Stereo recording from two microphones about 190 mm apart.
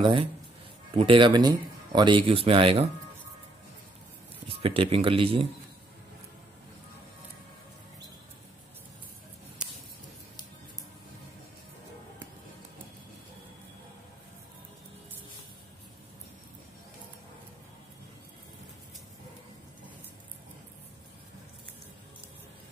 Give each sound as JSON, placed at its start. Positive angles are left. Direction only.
{"t": 0.0, "sound": "speech", "side_deg": -25}
{"t": 4.5, "sound": "speech", "side_deg": -30}